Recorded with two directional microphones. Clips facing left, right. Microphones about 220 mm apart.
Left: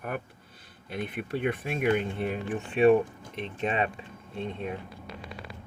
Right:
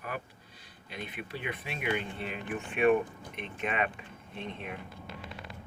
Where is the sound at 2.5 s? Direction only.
30° left (ahead or behind).